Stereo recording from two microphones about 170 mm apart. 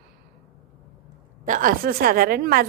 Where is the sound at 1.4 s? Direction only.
50° right (ahead or behind).